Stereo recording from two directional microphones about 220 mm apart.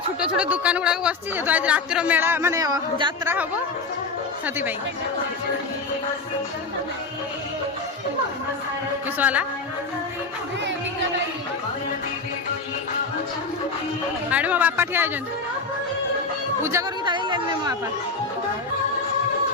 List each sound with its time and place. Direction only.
0.2 s speech: 5° right (ahead or behind)
9.0 s speech: 5° right (ahead or behind)
14.3 s speech: 5° right (ahead or behind)
16.6 s speech: 15° right (ahead or behind)